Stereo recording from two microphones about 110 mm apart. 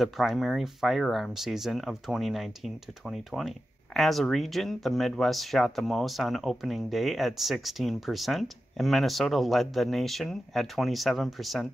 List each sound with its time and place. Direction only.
0.0 s speech: centre (ahead or behind)